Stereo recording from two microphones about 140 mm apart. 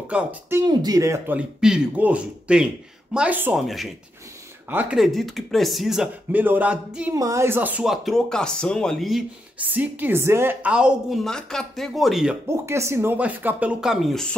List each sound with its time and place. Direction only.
0.1 s speech: 15° right (ahead or behind)
0.7 s speech: 25° right (ahead or behind)
3.5 s speech: centre (ahead or behind)
7.2 s speech: 20° right (ahead or behind); by 9.2 s centre (ahead or behind)
9.6 s speech: 10° right (ahead or behind)
11.2 s speech: 5° left (ahead or behind)
12.4 s speech: 20° right (ahead or behind); by 14.3 s centre (ahead or behind)